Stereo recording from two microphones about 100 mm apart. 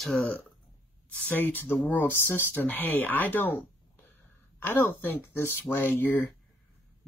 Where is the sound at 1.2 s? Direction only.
20° left (ahead or behind).